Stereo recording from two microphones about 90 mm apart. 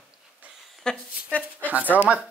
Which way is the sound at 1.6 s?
20° right (ahead or behind).